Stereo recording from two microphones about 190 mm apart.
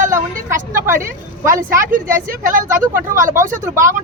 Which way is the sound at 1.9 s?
45° right (ahead or behind).